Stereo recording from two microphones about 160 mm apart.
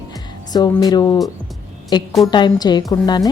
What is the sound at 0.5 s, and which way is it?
A woman's voice, 25° left (ahead or behind).